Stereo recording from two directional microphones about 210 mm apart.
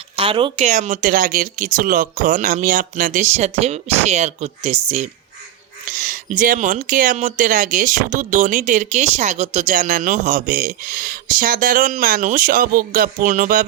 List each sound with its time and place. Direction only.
0.2 s speech: 25° right (ahead or behind); by 13.7 s 40° right (ahead or behind)